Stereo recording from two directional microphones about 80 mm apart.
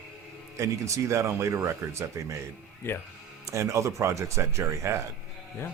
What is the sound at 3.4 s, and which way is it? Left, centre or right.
Speech, right.